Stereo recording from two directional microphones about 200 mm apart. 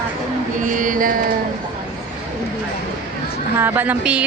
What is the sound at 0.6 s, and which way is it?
Mantra, 40° right (ahead or behind).